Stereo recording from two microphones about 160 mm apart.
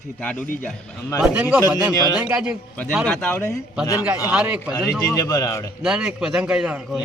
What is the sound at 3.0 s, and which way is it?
Speech, 10° left (ahead or behind).